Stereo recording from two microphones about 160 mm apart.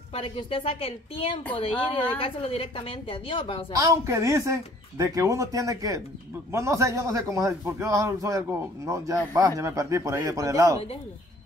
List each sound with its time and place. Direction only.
0.1 s a woman's voice: 35° left (ahead or behind)
3.7 s a man's voice: 20° right (ahead or behind)